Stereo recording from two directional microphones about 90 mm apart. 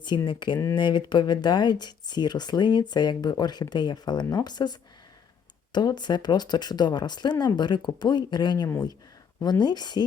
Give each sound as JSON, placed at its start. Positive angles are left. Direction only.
{"t": 0.3, "sound": "speech", "side_deg": 60}